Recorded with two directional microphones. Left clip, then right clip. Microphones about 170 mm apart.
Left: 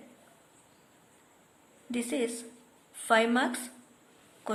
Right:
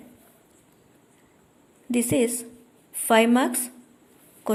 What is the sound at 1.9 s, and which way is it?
A woman's voice, 35° right (ahead or behind).